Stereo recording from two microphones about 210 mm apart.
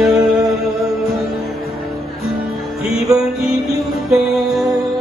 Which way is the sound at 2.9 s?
5° right (ahead or behind).